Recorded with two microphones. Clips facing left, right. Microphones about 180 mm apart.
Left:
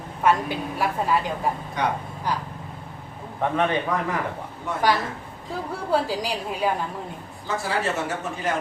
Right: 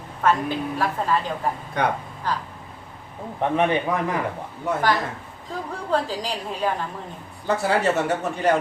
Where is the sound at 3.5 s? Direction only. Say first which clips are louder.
Right 2 dB; 15° right (ahead or behind).